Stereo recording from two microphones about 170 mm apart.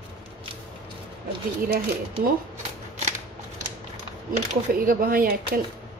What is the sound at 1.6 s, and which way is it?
Speech, 60° right (ahead or behind).